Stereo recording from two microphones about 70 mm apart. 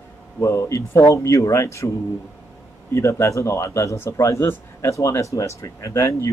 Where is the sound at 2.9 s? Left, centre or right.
Left.